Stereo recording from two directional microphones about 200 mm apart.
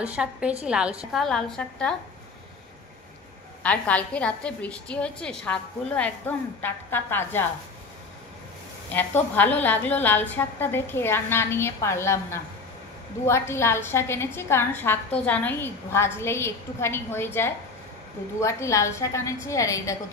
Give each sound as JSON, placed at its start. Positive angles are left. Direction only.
{"t": 0.0, "sound": "a woman's voice", "side_deg": -5}
{"t": 3.6, "sound": "a woman's voice", "side_deg": 5}
{"t": 8.9, "sound": "a woman's voice", "side_deg": 10}